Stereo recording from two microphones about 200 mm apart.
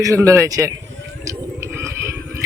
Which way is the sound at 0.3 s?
15° right (ahead or behind).